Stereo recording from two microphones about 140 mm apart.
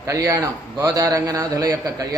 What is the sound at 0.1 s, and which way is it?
A man's voice, 25° right (ahead or behind).